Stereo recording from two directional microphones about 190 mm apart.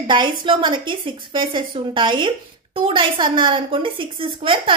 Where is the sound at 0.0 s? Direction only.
25° right (ahead or behind).